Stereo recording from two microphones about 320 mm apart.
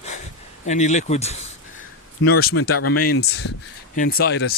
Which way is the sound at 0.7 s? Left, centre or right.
Left.